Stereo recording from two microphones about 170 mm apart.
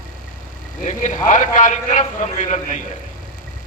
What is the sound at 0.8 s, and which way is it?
A man's voice, 45° left (ahead or behind).